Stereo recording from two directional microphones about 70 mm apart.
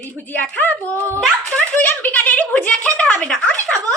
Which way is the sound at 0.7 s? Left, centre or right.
Right.